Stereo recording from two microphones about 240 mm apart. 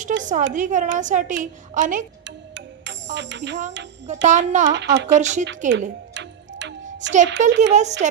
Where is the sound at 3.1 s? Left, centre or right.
Right.